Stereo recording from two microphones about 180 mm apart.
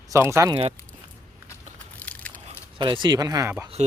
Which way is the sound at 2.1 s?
10° left (ahead or behind).